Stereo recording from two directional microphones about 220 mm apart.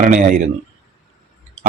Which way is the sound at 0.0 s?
35° right (ahead or behind).